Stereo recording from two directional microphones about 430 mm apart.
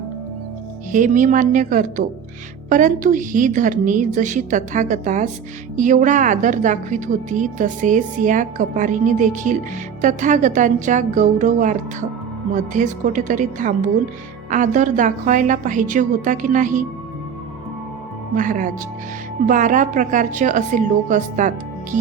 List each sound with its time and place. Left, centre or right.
0.9 s a woman's voice: centre
18.3 s a woman's voice: centre